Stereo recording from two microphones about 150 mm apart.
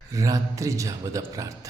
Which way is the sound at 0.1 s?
20° right (ahead or behind).